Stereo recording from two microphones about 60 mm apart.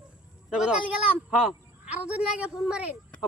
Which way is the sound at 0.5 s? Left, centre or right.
Centre.